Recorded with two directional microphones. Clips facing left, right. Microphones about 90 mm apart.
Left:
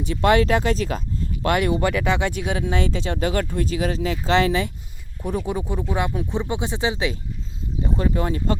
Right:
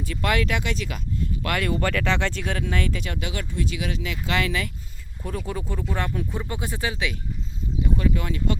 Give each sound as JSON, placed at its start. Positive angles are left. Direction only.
{"t": 0.0, "sound": "speech", "side_deg": 25}
{"t": 1.5, "sound": "speech", "side_deg": 15}
{"t": 3.2, "sound": "speech", "side_deg": 45}
{"t": 5.2, "sound": "speech", "side_deg": 15}